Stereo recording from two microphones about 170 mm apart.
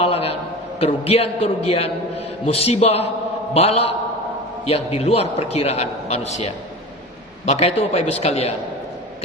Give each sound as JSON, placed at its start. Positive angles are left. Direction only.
{"t": 0.0, "sound": "a sound", "side_deg": 35}
{"t": 0.8, "sound": "a man's voice", "side_deg": 35}
{"t": 7.4, "sound": "a man's voice", "side_deg": 40}